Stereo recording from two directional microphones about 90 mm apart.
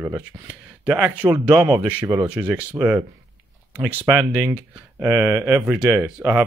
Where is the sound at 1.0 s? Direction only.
20° right (ahead or behind).